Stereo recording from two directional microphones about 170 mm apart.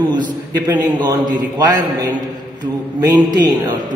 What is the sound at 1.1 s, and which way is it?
A man's voice, 20° right (ahead or behind).